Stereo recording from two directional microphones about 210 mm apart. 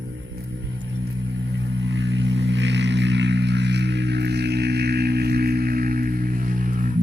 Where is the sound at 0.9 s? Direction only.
60° right (ahead or behind); by 7.0 s 40° right (ahead or behind).